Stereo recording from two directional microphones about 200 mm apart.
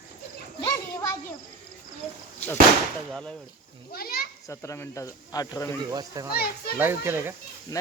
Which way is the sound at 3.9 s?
50° left (ahead or behind).